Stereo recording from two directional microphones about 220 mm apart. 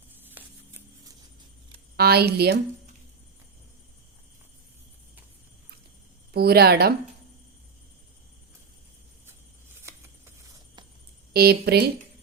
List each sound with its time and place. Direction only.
0.1 s a sound: 10° right (ahead or behind)
2.0 s speech: 45° right (ahead or behind)
6.3 s speech: 45° right (ahead or behind)
11.3 s speech: 45° right (ahead or behind)